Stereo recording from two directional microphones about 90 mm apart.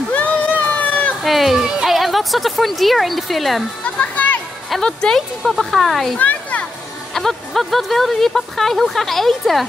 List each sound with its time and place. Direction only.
0.1 s crowd: 15° left (ahead or behind)
1.2 s a sound: centre (ahead or behind)
4.0 s music: 20° left (ahead or behind)
4.6 s speech: 5° left (ahead or behind)
6.1 s a sound: 15° left (ahead or behind)
7.2 s speech: 5° left (ahead or behind)